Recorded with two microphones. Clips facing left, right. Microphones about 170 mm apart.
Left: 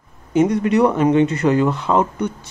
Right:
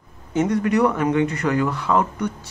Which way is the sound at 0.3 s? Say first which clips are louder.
Left 4 dB; 20° left (ahead or behind).